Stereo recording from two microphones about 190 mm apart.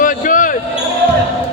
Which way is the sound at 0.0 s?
45° left (ahead or behind).